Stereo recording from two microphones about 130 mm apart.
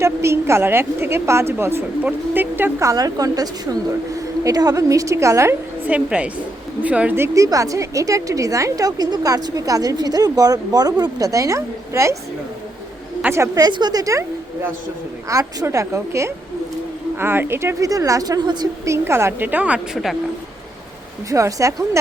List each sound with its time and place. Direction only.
0.0 s a woman's voice: 20° right (ahead or behind)
13.2 s a woman's voice: 20° right (ahead or behind)
19.0 s a woman's voice: 20° right (ahead or behind); by 20.1 s 5° right (ahead or behind)
21.2 s a woman's voice: 25° right (ahead or behind)